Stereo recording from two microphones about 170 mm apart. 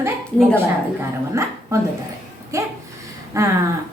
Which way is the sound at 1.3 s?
15° right (ahead or behind).